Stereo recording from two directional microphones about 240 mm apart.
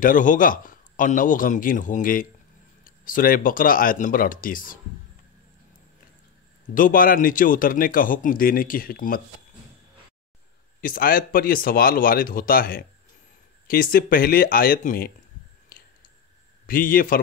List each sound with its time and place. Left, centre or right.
0.0 s a man's voice: left
6.7 s a man's voice: left
10.8 s a man's voice: left
16.6 s a man's voice: left